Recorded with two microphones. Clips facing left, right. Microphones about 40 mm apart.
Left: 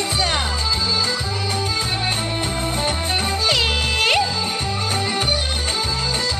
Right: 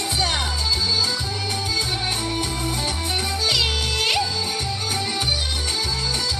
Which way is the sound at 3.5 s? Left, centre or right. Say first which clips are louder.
Left 3 dB; left.